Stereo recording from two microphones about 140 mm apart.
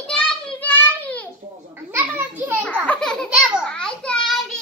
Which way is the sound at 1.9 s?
15° right (ahead or behind).